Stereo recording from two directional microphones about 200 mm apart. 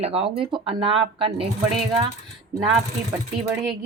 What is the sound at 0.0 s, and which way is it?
Speech, 30° right (ahead or behind).